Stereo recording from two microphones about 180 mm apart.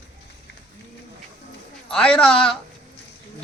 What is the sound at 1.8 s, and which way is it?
Speech, 5° left (ahead or behind).